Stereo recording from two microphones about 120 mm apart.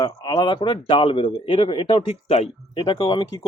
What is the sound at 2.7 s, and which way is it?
Speech, 40° left (ahead or behind).